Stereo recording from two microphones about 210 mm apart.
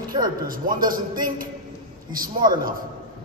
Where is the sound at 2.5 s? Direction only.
40° right (ahead or behind).